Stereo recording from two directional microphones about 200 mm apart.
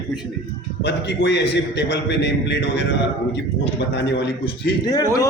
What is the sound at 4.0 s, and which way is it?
Speech, 60° left (ahead or behind).